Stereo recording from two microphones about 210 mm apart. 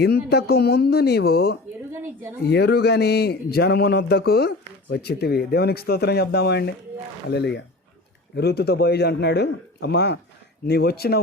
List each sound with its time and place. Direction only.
0.0 s a man's voice: 50° left (ahead or behind)